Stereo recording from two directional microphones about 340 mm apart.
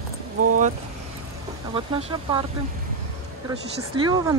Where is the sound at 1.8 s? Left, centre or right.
Centre.